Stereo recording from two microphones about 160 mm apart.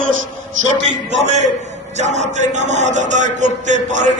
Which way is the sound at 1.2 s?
45° right (ahead or behind).